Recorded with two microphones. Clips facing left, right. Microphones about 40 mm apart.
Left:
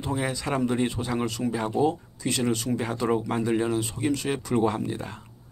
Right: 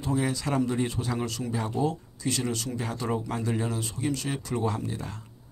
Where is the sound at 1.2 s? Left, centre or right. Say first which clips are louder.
Left 4 dB; left.